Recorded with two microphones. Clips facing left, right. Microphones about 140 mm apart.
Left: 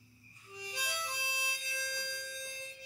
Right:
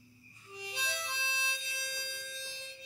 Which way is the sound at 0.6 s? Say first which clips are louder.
Right 1 dB; 25° right (ahead or behind).